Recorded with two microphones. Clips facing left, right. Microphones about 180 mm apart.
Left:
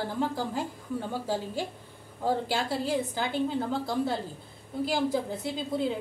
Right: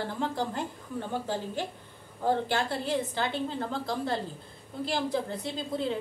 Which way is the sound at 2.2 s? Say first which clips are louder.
Right 1 dB; 10° left (ahead or behind).